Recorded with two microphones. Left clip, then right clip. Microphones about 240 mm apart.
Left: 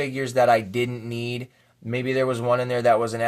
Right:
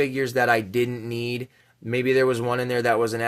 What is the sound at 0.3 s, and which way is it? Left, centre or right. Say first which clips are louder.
Speech: left 3 dB; right.